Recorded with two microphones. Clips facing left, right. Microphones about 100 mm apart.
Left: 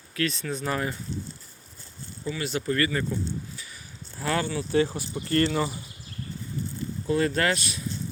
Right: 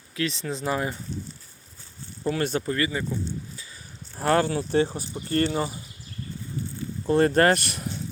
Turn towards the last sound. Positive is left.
turn(degrees=-55)  # may be behind; listen again after turning